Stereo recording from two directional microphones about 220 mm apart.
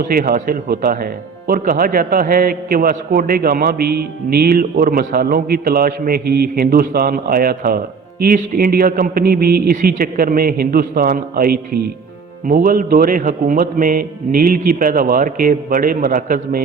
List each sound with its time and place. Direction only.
0.0 s speech: 45° right (ahead or behind)